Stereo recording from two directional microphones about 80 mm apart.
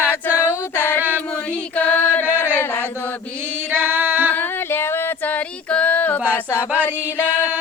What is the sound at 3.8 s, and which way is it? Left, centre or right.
Female singing, right.